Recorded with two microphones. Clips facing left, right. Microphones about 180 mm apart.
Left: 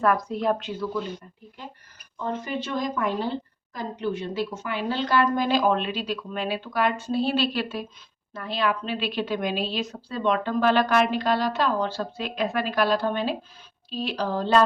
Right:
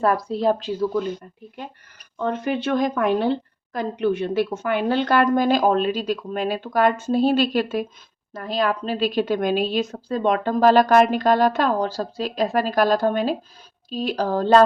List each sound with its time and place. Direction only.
0.0 s speech: 30° right (ahead or behind)
2.1 s a woman's voice: 65° right (ahead or behind); by 14.6 s 45° right (ahead or behind)